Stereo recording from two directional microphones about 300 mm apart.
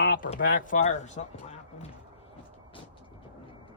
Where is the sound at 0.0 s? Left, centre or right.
Left.